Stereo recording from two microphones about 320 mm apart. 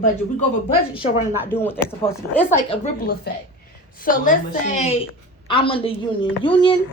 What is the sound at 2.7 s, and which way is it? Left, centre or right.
A woman's voice, left.